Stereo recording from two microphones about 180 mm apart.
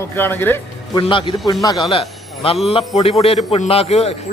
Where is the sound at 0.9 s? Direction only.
30° left (ahead or behind).